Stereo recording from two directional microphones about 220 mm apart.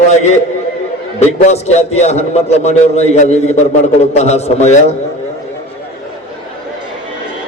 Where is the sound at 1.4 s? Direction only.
30° left (ahead or behind).